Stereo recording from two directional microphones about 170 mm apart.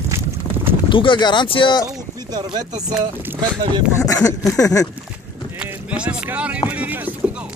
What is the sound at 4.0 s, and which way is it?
Speech, 20° left (ahead or behind).